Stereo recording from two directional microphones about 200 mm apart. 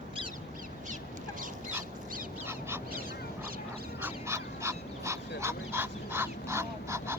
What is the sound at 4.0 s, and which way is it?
Duck, 10° right (ahead or behind).